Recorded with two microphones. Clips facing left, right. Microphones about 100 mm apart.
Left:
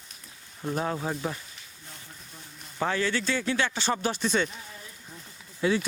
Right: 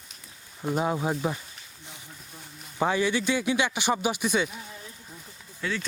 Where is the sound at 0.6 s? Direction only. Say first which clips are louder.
Right 3 dB; 10° right (ahead or behind).